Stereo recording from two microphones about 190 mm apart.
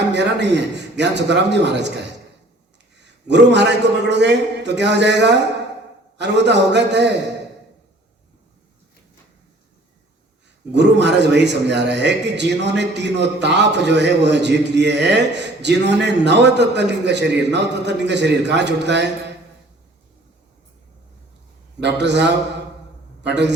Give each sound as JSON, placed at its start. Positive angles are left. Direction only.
{"t": 0.1, "sound": "a man's voice", "side_deg": -65}
{"t": 3.0, "sound": "a man's voice", "side_deg": -65}
{"t": 10.7, "sound": "a man's voice", "side_deg": -65}
{"t": 21.8, "sound": "a man's voice", "side_deg": -65}